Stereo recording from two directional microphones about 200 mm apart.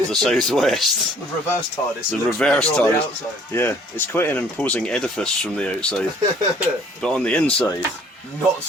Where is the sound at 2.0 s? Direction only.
5° left (ahead or behind).